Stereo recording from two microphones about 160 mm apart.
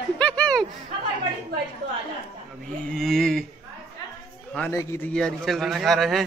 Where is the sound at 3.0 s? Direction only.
Centre (ahead or behind).